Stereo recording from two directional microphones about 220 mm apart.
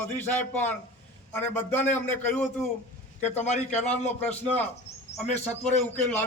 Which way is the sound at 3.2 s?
30° left (ahead or behind).